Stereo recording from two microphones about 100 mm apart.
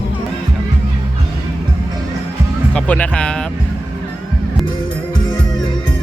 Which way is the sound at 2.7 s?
10° left (ahead or behind).